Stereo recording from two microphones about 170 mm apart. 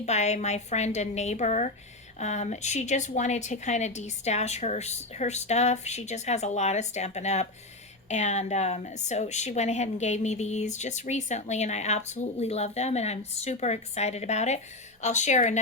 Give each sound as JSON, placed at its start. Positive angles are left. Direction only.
{"t": 0.0, "sound": "a woman's voice", "side_deg": 40}